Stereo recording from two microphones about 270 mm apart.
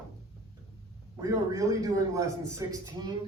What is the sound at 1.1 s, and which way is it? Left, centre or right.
A man's voice, centre.